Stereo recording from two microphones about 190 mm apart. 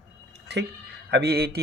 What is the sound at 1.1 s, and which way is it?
Speech, 55° right (ahead or behind).